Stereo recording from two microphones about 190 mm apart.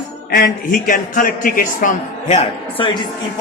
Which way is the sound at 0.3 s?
50° left (ahead or behind).